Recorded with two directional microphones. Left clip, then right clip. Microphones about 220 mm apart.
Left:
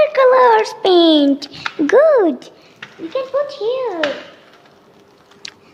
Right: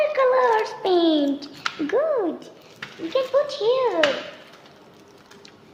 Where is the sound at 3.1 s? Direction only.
25° left (ahead or behind).